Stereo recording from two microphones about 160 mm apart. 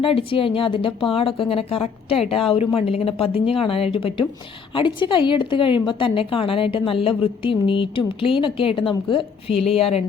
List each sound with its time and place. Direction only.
0.0 s a woman's voice: 35° left (ahead or behind)